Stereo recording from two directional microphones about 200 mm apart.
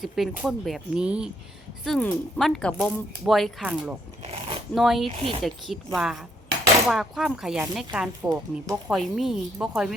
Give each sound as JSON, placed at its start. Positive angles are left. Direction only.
{"t": 0.0, "sound": "speech", "side_deg": 0}
{"t": 4.2, "sound": "a sound", "side_deg": -30}
{"t": 4.7, "sound": "speech", "side_deg": 0}
{"t": 5.0, "sound": "speech", "side_deg": -30}
{"t": 5.4, "sound": "speech", "side_deg": 0}